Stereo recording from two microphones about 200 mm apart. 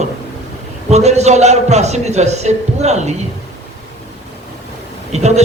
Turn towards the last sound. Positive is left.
turn(degrees=-35)  # may be behind; listen again after turning